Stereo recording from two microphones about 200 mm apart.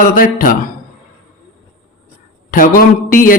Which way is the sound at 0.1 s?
45° left (ahead or behind).